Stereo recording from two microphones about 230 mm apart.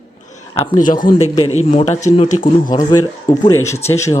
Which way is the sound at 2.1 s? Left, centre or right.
Left.